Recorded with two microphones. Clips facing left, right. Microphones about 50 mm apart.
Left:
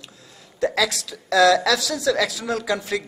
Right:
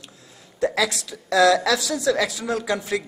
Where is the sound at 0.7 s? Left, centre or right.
Right.